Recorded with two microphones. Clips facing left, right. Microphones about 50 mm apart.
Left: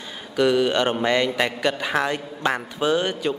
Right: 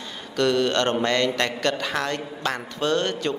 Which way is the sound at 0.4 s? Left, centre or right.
Centre.